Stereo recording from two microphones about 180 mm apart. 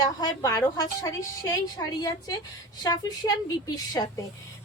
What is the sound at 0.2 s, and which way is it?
A woman's voice, 20° left (ahead or behind).